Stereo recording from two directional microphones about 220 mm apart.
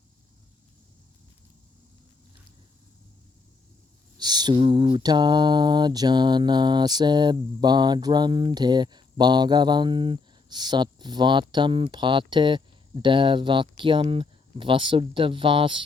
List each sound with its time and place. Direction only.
4.2 s mantra: 20° right (ahead or behind)